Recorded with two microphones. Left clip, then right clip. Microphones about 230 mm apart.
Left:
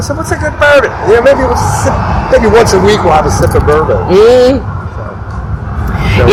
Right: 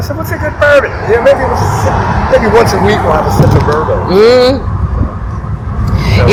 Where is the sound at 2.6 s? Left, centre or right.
Left.